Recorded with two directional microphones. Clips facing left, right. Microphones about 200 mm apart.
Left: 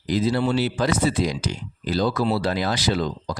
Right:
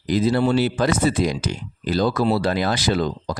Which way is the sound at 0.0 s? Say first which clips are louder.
Right 3 dB; 55° right (ahead or behind).